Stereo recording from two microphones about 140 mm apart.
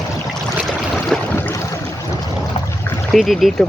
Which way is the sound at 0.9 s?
15° left (ahead or behind).